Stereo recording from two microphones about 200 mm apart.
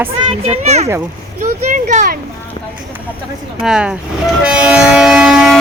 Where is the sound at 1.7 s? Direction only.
40° right (ahead or behind).